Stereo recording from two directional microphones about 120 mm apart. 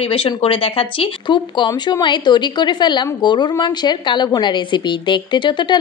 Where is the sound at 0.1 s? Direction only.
50° left (ahead or behind).